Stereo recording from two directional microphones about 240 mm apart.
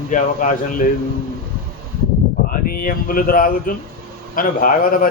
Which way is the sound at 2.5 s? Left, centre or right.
Left.